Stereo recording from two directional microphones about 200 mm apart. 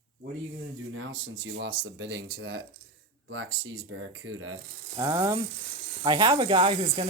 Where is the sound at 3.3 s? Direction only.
80° right.